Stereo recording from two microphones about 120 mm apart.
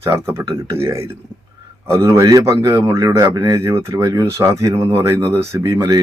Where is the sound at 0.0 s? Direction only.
20° right (ahead or behind).